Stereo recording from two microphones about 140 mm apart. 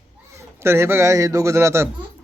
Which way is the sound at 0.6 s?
20° right (ahead or behind).